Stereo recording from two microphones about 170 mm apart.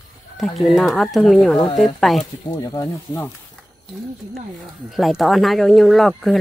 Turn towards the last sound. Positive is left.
turn(degrees=0)  # may be behind; listen again after turning